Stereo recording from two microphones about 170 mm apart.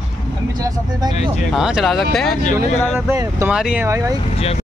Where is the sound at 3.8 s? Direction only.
20° right (ahead or behind).